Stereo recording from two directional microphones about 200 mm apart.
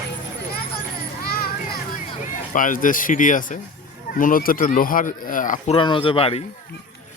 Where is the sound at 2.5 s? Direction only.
40° left (ahead or behind).